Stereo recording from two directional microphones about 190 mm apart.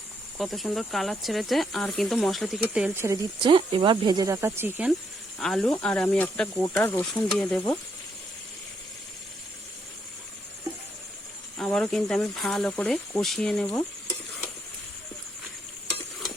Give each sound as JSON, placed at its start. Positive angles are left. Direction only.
{"t": 0.3, "sound": "speech", "side_deg": 0}
{"t": 3.4, "sound": "speech", "side_deg": -30}
{"t": 5.4, "sound": "speech", "side_deg": 0}
{"t": 11.5, "sound": "speech", "side_deg": 5}